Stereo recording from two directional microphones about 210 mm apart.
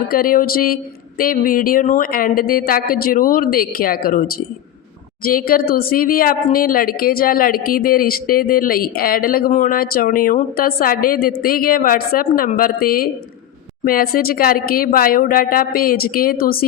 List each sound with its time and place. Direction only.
0.1 s speech: 40° left (ahead or behind)